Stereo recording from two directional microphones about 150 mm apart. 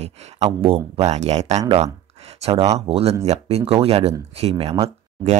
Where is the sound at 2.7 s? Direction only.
40° right (ahead or behind).